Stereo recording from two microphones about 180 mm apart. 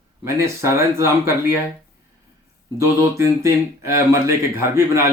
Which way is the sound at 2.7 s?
15° right (ahead or behind).